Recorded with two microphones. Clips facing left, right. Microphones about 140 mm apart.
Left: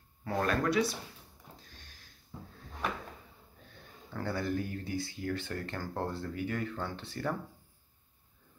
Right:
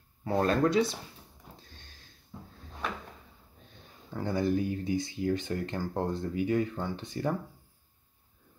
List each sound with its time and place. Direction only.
0.2 s speech: 25° right (ahead or behind)
4.1 s speech: 15° right (ahead or behind)